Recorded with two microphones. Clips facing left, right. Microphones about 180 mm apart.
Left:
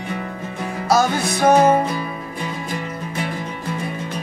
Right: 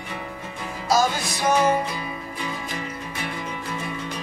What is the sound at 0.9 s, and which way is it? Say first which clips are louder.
Music: left 4 dB; 60° left (ahead or behind).